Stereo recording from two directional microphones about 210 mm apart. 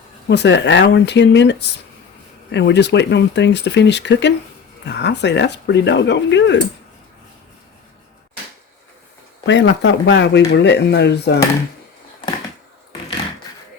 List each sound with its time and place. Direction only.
0.3 s speech: 55° left (ahead or behind)
9.5 s speech: 60° left (ahead or behind)